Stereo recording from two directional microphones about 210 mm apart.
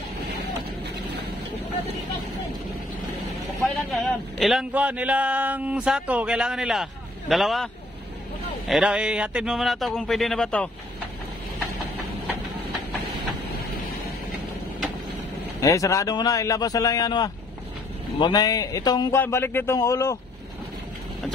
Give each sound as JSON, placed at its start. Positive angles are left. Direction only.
{"t": 3.6, "sound": "a man's voice", "side_deg": 0}
{"t": 15.6, "sound": "a man's voice", "side_deg": 15}